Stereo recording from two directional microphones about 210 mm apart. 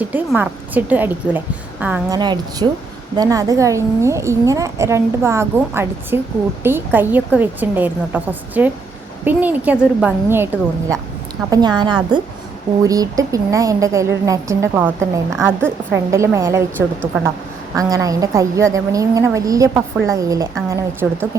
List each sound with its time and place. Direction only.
0.0 s a woman's voice: 10° right (ahead or behind)
2.0 s a woman's voice: 20° right (ahead or behind)